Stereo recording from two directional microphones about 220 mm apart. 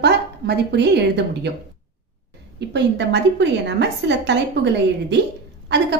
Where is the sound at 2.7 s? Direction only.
50° right (ahead or behind).